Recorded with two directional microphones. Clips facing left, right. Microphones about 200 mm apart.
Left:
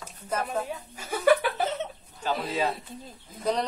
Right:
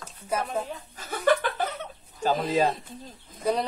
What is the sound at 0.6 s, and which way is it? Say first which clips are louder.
Chuckle: left 2 dB; 10° left (ahead or behind).